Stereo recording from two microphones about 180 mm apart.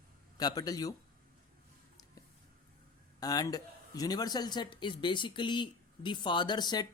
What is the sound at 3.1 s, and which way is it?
Speech, 20° left (ahead or behind).